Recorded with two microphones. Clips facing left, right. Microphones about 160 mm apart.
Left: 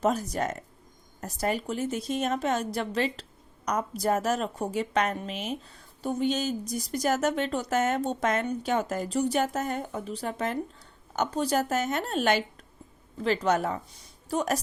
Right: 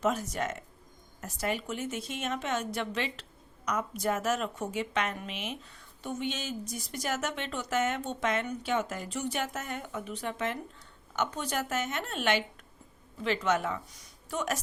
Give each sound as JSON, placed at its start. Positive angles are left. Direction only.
{"t": 0.0, "sound": "a woman's voice", "side_deg": 35}